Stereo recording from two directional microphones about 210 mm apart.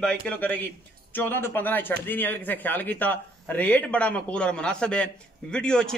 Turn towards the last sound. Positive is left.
turn(degrees=5)  # may be behind; listen again after turning